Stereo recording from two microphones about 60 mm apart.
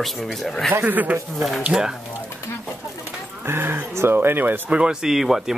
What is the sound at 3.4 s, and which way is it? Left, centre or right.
Speech, right.